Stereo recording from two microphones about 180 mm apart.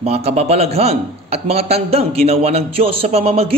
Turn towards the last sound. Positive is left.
turn(degrees=-35)  # may be behind; listen again after turning